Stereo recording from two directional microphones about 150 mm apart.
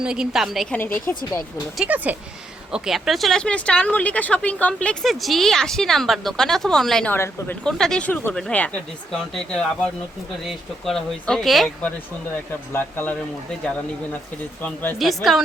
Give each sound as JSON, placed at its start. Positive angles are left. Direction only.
{"t": 0.0, "sound": "speech", "side_deg": -5}
{"t": 0.8, "sound": "speech", "side_deg": 15}
{"t": 1.8, "sound": "speech", "side_deg": -10}
{"t": 7.6, "sound": "speech", "side_deg": 5}
{"t": 12.7, "sound": "speech", "side_deg": 10}
{"t": 14.6, "sound": "speech", "side_deg": 10}
{"t": 14.9, "sound": "speech", "side_deg": 0}